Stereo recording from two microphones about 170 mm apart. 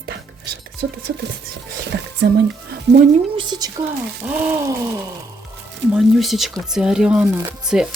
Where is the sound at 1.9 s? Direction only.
80° right.